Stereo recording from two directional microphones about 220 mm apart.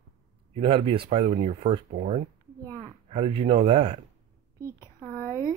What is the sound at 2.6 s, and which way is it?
Speech, 15° right (ahead or behind).